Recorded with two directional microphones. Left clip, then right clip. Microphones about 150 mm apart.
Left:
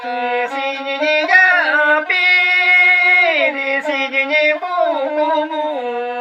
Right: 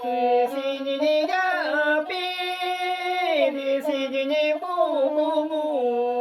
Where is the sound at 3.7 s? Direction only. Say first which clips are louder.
Left 7 dB; 45° right (ahead or behind).